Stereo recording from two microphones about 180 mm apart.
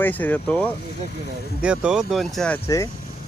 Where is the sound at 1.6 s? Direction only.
5° right (ahead or behind).